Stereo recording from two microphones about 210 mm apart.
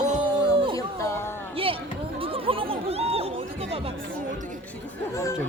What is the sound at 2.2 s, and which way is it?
Chatter, 25° right (ahead or behind).